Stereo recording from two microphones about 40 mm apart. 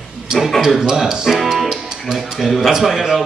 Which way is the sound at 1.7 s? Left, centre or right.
Centre.